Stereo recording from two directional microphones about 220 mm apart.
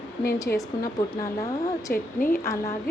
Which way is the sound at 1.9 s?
40° left (ahead or behind).